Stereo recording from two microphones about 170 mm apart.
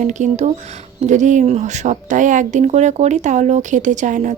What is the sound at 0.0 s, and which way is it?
A woman's voice, 45° right (ahead or behind).